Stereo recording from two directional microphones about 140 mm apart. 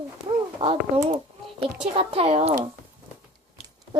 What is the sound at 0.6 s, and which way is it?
Speech, 40° right (ahead or behind).